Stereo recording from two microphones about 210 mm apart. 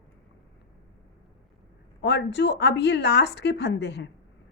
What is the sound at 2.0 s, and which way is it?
A woman's voice, 55° left (ahead or behind).